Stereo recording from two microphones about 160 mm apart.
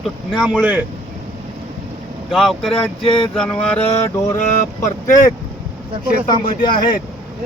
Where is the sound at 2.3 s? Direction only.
Centre (ahead or behind).